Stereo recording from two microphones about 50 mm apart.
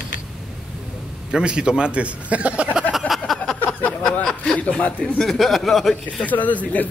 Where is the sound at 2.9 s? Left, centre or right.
Centre.